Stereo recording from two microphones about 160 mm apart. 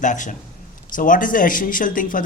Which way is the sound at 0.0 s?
50° left (ahead or behind).